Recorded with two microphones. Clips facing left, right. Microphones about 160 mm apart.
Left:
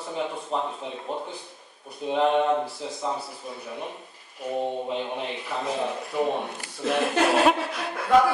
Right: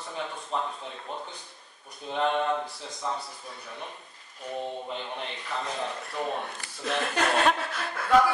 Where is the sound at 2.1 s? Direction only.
5° left (ahead or behind).